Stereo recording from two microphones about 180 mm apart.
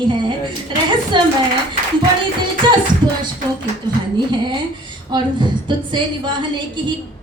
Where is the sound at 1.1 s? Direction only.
25° right (ahead or behind).